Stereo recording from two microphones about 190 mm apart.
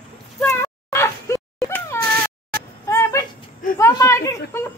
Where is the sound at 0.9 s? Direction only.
15° left (ahead or behind).